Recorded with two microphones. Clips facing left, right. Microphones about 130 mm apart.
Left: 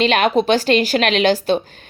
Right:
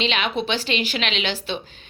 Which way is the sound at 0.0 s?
45° left (ahead or behind).